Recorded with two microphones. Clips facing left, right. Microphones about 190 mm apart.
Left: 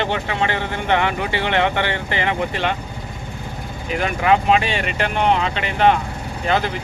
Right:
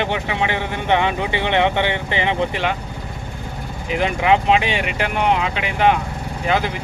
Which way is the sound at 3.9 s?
20° right (ahead or behind).